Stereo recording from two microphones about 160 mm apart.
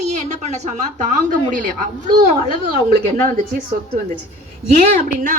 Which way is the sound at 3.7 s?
60° right (ahead or behind).